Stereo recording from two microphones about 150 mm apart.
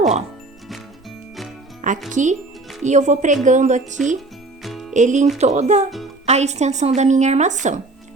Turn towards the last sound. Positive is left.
turn(degrees=-55)  # may be behind; listen again after turning